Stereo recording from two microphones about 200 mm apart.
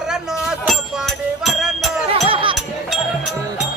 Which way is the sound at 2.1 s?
25° right (ahead or behind).